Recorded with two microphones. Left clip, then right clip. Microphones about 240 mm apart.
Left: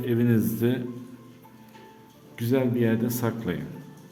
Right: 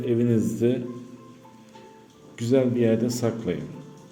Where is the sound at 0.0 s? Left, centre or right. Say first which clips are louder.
Right 2 dB; centre.